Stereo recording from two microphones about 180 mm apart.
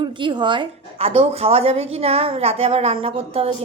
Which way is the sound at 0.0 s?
25° right (ahead or behind).